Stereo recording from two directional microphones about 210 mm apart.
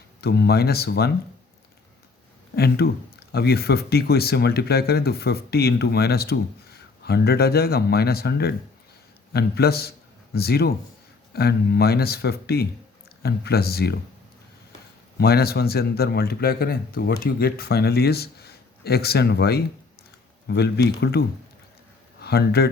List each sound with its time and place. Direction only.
0.2 s speech: 50° left (ahead or behind)
2.6 s speech: 50° left (ahead or behind)
15.2 s speech: 50° left (ahead or behind)